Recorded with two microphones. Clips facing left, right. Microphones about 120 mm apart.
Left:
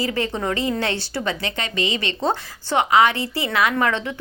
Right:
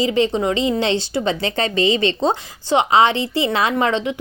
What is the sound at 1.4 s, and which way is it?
A woman's voice, 35° right (ahead or behind).